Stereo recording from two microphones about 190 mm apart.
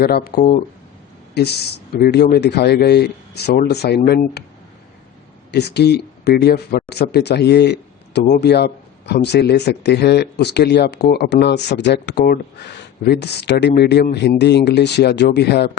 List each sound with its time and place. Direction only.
0.0 s speech: 55° left (ahead or behind)
5.5 s speech: 60° left (ahead or behind)